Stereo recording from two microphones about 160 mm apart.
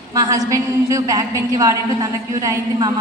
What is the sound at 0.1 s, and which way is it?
A woman's voice, 20° right (ahead or behind).